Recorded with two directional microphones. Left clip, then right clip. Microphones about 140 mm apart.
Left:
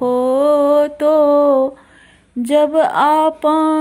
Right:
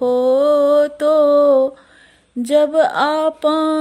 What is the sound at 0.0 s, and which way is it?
Mantra, 35° right (ahead or behind).